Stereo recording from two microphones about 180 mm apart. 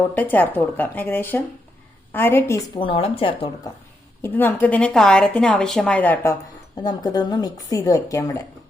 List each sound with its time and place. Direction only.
0.1 s a woman's voice: 10° left (ahead or behind)
2.7 s speech: 30° left (ahead or behind)
4.2 s a woman's voice: 10° left (ahead or behind)
6.8 s speech: 25° left (ahead or behind)